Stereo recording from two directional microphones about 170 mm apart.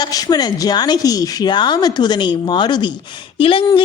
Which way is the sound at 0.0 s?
20° left (ahead or behind).